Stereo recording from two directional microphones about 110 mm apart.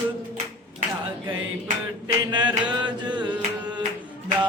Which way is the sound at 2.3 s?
45° right (ahead or behind).